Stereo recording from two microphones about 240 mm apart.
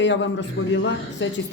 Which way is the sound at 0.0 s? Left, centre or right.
Left.